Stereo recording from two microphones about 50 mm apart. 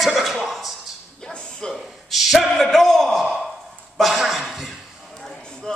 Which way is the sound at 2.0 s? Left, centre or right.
Centre.